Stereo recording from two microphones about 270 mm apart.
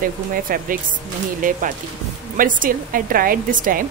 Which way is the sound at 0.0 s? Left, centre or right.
Right.